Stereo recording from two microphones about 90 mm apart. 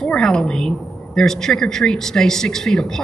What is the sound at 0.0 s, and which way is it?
A woman's voice, 5° left (ahead or behind).